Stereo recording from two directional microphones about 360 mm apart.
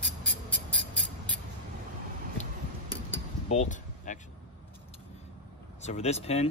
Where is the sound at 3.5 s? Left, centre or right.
Centre.